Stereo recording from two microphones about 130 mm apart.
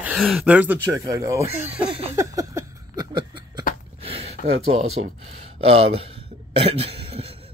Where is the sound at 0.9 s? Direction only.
25° right (ahead or behind).